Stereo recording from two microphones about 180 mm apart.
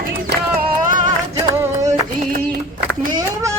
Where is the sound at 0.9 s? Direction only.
45° right (ahead or behind).